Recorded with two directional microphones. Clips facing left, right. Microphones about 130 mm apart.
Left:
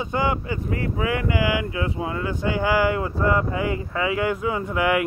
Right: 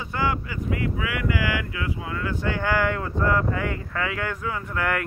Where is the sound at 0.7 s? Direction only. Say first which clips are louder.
Left 2 dB; 35° left (ahead or behind).